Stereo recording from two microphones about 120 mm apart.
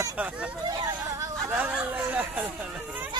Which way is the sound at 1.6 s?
15° right (ahead or behind).